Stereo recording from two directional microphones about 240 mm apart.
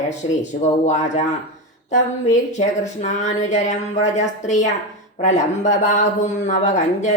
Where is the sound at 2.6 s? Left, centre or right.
Left.